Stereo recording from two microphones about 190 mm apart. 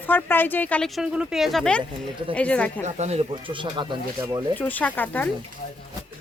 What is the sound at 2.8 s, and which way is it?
Speech, 35° right (ahead or behind).